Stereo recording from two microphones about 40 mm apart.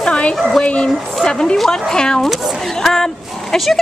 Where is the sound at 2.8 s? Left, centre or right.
Centre.